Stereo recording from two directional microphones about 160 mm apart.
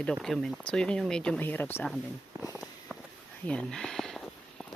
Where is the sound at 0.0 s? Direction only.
Centre (ahead or behind).